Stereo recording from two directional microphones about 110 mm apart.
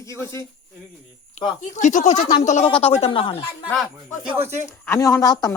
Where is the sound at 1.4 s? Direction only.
90° left.